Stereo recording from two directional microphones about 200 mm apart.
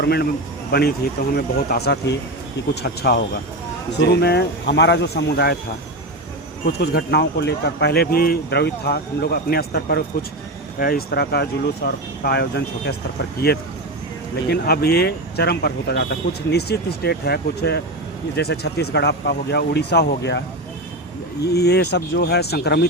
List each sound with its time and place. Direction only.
0.0 s speech: 50° left (ahead or behind)
6.7 s speech: 55° left (ahead or behind)
14.5 s speech: 50° left (ahead or behind)
21.4 s speech: 55° left (ahead or behind)